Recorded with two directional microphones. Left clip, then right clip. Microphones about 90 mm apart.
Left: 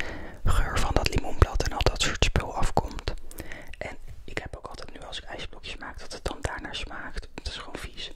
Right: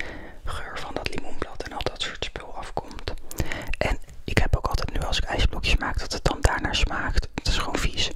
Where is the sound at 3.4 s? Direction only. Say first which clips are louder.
Right 11 dB; 30° right (ahead or behind).